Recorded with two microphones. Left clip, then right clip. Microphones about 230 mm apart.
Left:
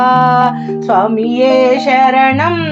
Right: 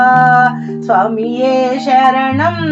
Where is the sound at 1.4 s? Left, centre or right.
Left.